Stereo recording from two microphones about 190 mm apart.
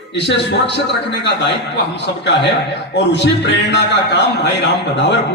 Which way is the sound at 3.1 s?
65° left (ahead or behind).